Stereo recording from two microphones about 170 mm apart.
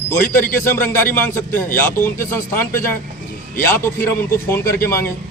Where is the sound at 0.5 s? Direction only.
10° left (ahead or behind).